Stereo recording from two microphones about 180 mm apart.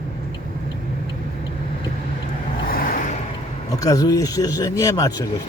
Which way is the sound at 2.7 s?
50° left (ahead or behind).